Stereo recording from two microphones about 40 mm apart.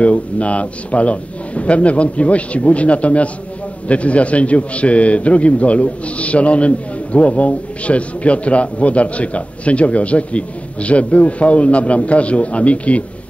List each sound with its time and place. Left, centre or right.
0.0 s a man's voice: left